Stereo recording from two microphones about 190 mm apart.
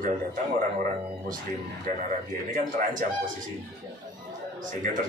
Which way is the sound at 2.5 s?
45° right (ahead or behind).